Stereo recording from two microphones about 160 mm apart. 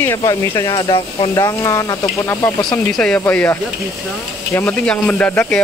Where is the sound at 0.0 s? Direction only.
20° left (ahead or behind).